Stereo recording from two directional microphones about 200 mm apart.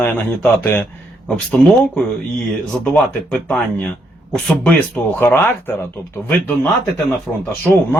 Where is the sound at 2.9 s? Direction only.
5° left (ahead or behind).